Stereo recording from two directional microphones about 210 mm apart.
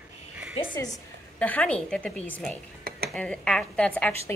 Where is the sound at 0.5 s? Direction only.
20° left (ahead or behind).